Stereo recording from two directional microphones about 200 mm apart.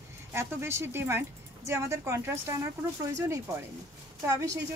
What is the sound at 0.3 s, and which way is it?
Speech, 10° right (ahead or behind).